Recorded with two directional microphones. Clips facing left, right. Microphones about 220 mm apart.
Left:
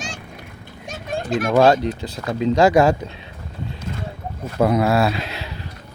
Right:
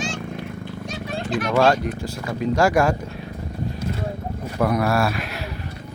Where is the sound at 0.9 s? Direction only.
45° left (ahead or behind).